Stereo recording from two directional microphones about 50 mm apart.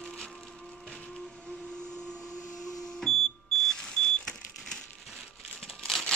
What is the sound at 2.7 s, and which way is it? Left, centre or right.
Smoke detector, centre.